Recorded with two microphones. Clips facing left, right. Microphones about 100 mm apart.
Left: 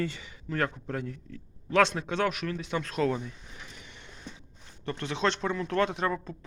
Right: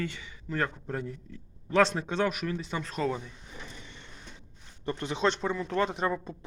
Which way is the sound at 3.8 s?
10° left (ahead or behind).